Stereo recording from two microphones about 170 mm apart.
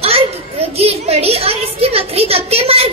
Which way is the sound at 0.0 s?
35° right (ahead or behind).